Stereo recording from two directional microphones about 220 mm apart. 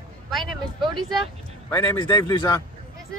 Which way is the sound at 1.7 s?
20° left (ahead or behind).